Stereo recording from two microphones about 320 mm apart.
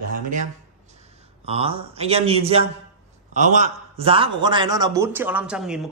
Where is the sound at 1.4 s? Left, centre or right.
Centre.